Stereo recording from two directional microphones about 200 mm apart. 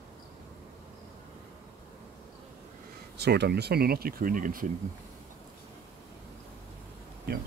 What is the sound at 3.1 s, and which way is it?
Speech, 55° right (ahead or behind).